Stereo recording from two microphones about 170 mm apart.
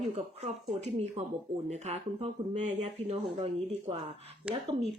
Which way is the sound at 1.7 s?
40° right (ahead or behind).